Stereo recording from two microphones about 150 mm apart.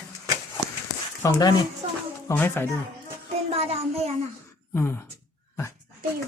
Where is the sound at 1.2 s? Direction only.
25° left (ahead or behind).